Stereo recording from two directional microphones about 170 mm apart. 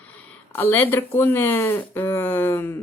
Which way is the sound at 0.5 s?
10° left (ahead or behind).